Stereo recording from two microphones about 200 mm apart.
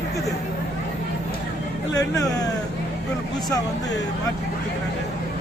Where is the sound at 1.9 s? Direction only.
20° left (ahead or behind).